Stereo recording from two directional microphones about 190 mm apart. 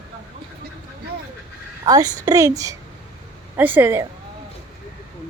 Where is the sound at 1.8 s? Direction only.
20° right (ahead or behind).